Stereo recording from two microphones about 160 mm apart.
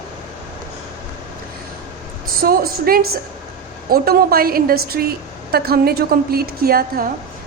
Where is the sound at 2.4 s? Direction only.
70° right (ahead or behind).